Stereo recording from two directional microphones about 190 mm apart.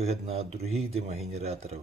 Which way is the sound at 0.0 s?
35° right (ahead or behind).